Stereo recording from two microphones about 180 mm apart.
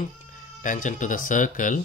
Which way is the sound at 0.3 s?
45° left (ahead or behind).